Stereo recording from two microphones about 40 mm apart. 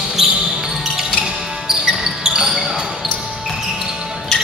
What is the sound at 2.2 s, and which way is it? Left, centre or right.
Basketball bounce, right.